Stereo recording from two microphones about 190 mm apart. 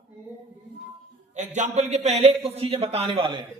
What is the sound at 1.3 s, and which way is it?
A man's voice, 40° right (ahead or behind).